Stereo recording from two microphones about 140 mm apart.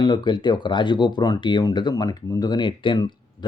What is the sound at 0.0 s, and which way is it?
Speech, 30° left (ahead or behind).